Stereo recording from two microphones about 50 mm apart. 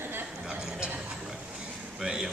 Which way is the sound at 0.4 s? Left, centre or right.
Centre.